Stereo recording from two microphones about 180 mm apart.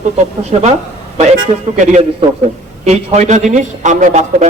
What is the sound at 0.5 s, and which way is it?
A man's voice, 35° right (ahead or behind).